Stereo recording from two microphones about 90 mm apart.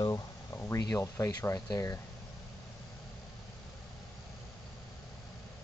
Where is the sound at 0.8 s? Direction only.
40° left (ahead or behind).